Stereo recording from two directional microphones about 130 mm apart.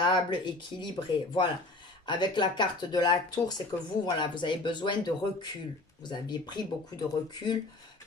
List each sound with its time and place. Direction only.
0.0 s speech: 35° left (ahead or behind)